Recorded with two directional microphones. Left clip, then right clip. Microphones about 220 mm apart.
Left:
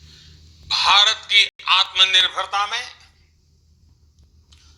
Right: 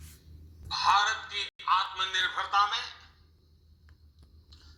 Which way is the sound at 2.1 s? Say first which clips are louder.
Left 9 dB; 40° left (ahead or behind).